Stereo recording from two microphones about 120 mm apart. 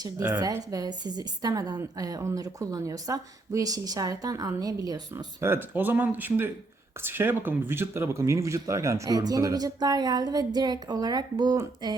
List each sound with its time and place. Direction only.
0.0 s a woman's voice: 30° right (ahead or behind)